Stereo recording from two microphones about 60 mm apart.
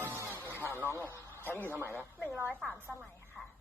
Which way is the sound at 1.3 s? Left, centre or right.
Left.